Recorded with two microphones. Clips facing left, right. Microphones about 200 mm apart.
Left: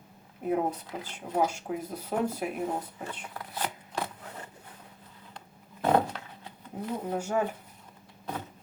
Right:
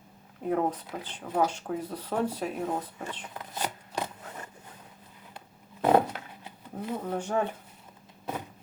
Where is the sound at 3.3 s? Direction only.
20° right (ahead or behind).